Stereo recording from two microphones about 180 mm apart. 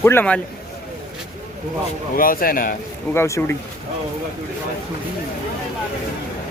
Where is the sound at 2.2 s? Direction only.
50° left (ahead or behind).